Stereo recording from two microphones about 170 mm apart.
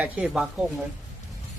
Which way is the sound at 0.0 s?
5° right (ahead or behind).